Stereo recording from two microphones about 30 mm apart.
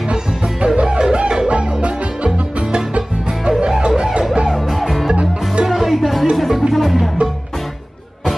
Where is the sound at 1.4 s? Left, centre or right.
Right.